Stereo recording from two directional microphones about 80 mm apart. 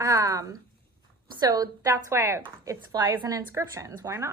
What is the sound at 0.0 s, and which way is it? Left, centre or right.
A woman's voice, right.